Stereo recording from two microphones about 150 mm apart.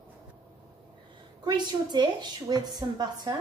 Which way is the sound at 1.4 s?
30° right (ahead or behind).